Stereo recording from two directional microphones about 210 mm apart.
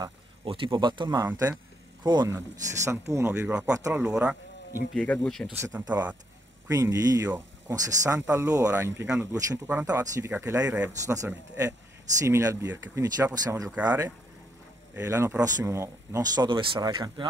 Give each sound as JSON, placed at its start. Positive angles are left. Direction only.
{"t": 0.0, "sound": "speech", "side_deg": -25}
{"t": 4.9, "sound": "speech", "side_deg": 5}
{"t": 5.6, "sound": "speech", "side_deg": -5}